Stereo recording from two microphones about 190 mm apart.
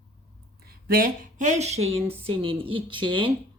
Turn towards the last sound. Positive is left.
turn(degrees=-25)  # may be behind; listen again after turning